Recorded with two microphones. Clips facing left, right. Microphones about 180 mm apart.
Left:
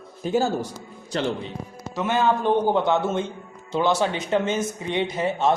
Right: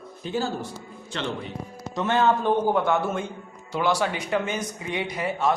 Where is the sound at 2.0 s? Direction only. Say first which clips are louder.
Even; 10° left (ahead or behind).